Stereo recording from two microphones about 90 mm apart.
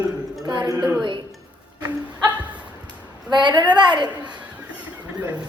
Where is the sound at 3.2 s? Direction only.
55° right (ahead or behind).